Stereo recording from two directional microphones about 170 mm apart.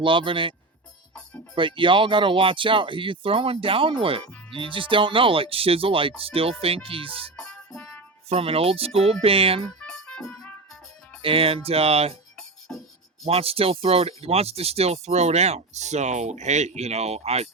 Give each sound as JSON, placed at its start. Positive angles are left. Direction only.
{"t": 0.0, "sound": "speech", "side_deg": -30}
{"t": 1.5, "sound": "speech", "side_deg": -30}
{"t": 7.3, "sound": "music", "side_deg": 5}
{"t": 8.3, "sound": "speech", "side_deg": -35}
{"t": 9.6, "sound": "music", "side_deg": 5}
{"t": 11.2, "sound": "speech", "side_deg": -30}
{"t": 12.4, "sound": "music", "side_deg": 5}
{"t": 13.2, "sound": "speech", "side_deg": -35}